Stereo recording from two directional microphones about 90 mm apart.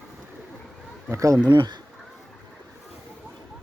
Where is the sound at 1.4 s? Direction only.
55° right (ahead or behind).